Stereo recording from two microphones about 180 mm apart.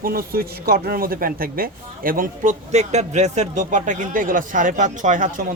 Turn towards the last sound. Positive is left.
turn(degrees=-45)  # may be behind; listen again after turning